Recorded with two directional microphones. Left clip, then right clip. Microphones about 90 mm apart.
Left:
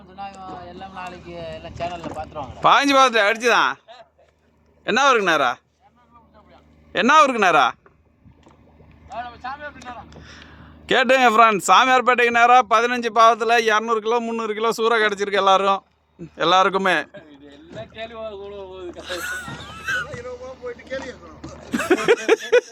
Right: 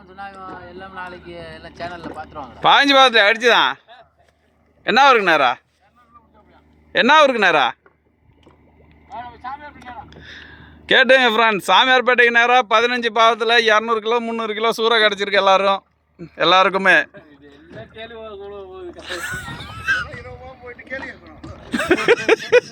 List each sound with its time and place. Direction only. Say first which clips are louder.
0.0 s a man's voice: right 1 dB; 5° right (ahead or behind)
4.8 s speech: right 4 dB; 20° right (ahead or behind)
6.9 s a man's voice: right 2 dB; centre (ahead or behind)
9.1 s a sound: even; 35° left (ahead or behind)
10.1 s a man's voice: right 4 dB; 15° left (ahead or behind); by 18.3 s 10° right (ahead or behind)
18.4 s a sound: right 1 dB; 5° right (ahead or behind)
20.2 s vehicle: left 4 dB; 30° left (ahead or behind)
20.9 s speech: right 1 dB; 5° left (ahead or behind)